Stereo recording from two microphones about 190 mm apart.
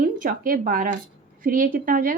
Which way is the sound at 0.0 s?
45° right (ahead or behind).